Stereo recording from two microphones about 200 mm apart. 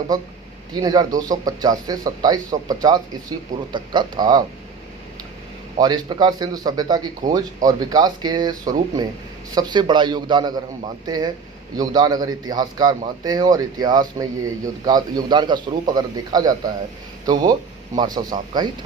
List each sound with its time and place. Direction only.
0.7 s speech: 20° right (ahead or behind)
5.8 s speech: 20° right (ahead or behind)